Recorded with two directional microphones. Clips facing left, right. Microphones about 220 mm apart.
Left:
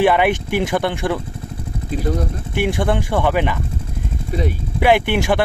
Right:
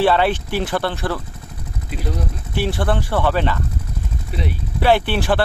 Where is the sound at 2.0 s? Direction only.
50° left (ahead or behind).